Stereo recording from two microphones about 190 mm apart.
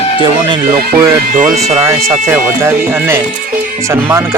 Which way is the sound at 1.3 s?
45° right (ahead or behind).